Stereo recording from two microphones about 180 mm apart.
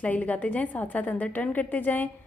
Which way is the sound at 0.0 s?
10° left (ahead or behind).